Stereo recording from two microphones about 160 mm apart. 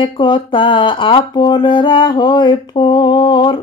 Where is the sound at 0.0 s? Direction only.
30° left (ahead or behind).